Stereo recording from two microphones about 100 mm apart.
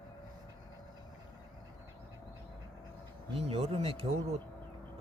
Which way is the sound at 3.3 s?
70° right (ahead or behind).